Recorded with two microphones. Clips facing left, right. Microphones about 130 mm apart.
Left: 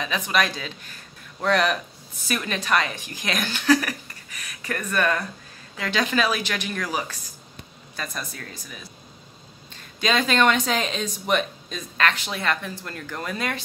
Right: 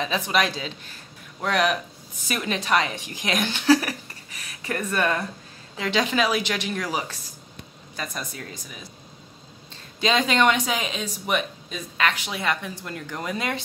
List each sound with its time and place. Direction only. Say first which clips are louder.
0.0 s a woman's voice: right 1 dB; 25° right (ahead or behind)
1.4 s a woman's voice: left 1 dB; 10° right (ahead or behind)
9.9 s speech: even; 20° right (ahead or behind)